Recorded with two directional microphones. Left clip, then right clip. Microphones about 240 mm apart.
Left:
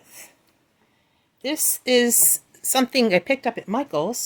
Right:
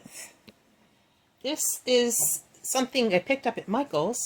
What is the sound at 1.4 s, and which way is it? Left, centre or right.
A woman's voice, left.